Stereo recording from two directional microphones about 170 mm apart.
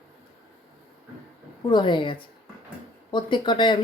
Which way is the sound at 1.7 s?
25° left (ahead or behind).